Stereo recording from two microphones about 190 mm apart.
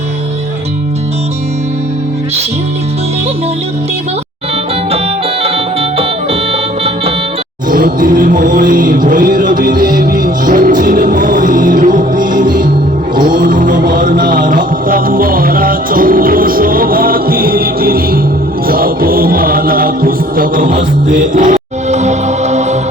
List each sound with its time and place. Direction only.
6.0 s music: 30° right (ahead or behind)
7.7 s music: 45° right (ahead or behind)